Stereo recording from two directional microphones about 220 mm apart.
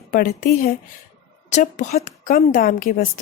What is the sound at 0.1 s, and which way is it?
A woman's voice, 40° left (ahead or behind).